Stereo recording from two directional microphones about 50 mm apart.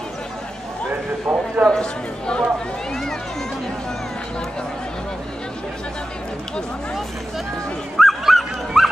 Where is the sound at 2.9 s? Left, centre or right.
Centre.